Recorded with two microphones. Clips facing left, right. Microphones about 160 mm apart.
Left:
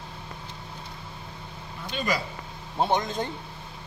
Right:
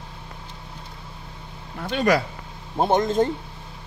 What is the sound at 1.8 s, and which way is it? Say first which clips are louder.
Speech: right 8 dB; 70° right (ahead or behind).